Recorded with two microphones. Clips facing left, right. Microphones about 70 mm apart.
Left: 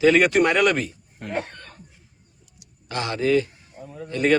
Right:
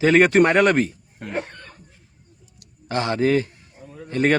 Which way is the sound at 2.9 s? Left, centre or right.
Right.